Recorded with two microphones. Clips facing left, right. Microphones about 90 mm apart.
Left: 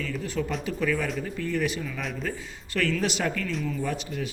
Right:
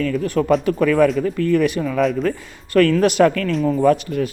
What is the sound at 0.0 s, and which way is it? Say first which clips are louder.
Speech: right 11 dB; 55° right (ahead or behind).